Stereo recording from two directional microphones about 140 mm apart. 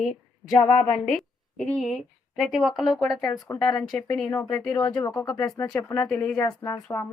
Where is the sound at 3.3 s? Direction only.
25° left (ahead or behind).